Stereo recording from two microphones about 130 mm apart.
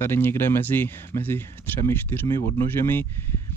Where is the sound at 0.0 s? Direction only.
20° left (ahead or behind).